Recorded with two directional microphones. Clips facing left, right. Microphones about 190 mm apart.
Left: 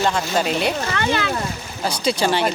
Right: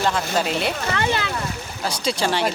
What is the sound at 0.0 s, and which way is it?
Speech, centre (ahead or behind).